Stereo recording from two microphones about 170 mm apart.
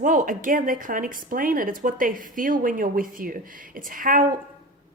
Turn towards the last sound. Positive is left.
turn(degrees=-55)  # may be behind; listen again after turning